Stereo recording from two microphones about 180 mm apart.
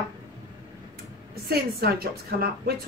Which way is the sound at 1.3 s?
60° right (ahead or behind).